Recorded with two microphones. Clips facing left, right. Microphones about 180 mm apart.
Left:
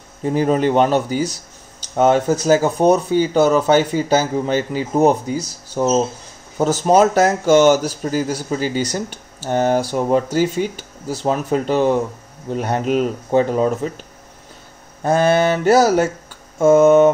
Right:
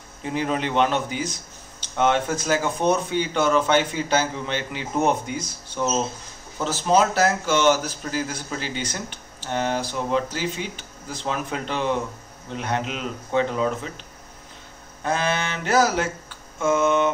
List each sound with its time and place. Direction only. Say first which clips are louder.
0.2 s speech: left 9 dB; 40° left (ahead or behind)
15.0 s speech: left 10 dB; 45° left (ahead or behind)